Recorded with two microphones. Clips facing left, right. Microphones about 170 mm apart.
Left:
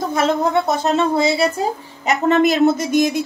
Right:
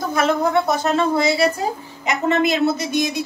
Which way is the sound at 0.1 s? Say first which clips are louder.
Even; 25° left (ahead or behind).